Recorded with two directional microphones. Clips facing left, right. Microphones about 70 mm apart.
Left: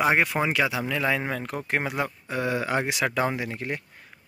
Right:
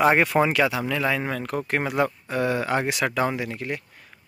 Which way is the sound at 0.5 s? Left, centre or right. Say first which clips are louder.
Right 3 dB; centre.